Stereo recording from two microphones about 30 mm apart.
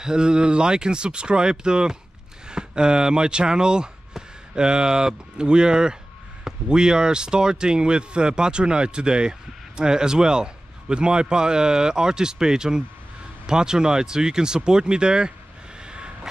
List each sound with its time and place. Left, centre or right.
0.0 s speech: right
15.8 s vehicle: right